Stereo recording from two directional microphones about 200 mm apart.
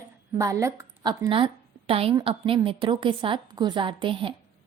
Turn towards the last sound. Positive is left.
turn(degrees=-25)  # may be behind; listen again after turning